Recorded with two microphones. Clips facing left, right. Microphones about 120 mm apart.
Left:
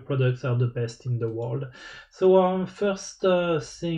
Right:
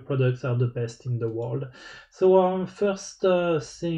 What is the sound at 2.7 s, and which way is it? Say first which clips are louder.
Speech: right 1 dB; 35° right (ahead or behind).